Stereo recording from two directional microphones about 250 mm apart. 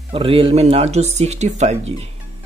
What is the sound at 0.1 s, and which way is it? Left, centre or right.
Speech, right.